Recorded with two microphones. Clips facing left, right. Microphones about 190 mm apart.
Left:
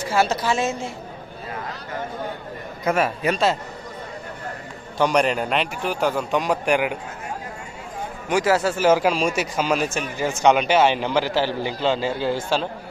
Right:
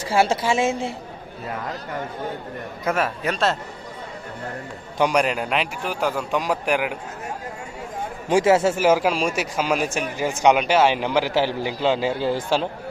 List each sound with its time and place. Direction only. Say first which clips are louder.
0.1 s a woman's voice: right 2 dB; 30° right (ahead or behind)
2.8 s a man's voice: left 2 dB; centre (ahead or behind)
4.9 s a man's voice: left 1 dB; 10° right (ahead or behind)
8.3 s a woman's voice: right 3 dB; 25° right (ahead or behind)
8.8 s a man's voice: left 1 dB; 5° right (ahead or behind)